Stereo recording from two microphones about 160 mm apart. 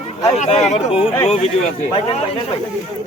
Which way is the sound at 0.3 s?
45° left (ahead or behind).